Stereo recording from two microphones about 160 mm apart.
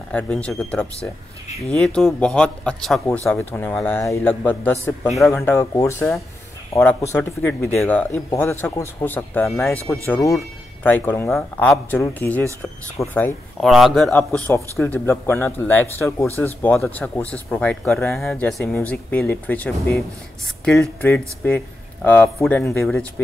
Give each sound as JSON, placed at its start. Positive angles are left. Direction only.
{"t": 0.1, "sound": "a man's voice", "side_deg": 5}
{"t": 5.0, "sound": "a man's voice", "side_deg": 0}
{"t": 5.3, "sound": "speech", "side_deg": 15}
{"t": 13.6, "sound": "a man's voice", "side_deg": 0}